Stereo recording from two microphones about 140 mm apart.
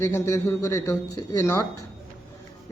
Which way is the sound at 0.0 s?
20° left (ahead or behind).